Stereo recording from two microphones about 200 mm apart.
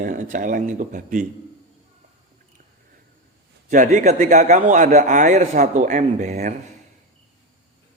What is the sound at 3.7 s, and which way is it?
A man's voice, 40° right (ahead or behind).